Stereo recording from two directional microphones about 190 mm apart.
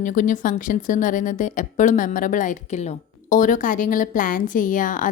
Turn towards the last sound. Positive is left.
turn(degrees=45)  # may be behind; listen again after turning